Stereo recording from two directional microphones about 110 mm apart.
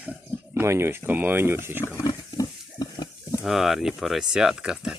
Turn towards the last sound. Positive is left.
turn(degrees=-5)  # may be behind; listen again after turning